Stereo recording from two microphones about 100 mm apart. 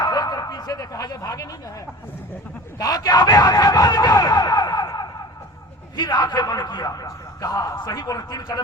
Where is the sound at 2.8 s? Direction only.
40° left (ahead or behind).